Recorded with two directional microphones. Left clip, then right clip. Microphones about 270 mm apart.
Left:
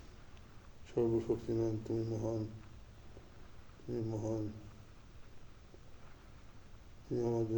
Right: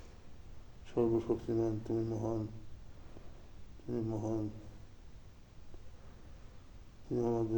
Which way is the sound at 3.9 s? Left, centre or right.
Centre.